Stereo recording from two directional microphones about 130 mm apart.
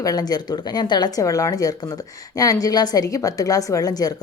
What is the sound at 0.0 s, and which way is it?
Speech, 30° left (ahead or behind).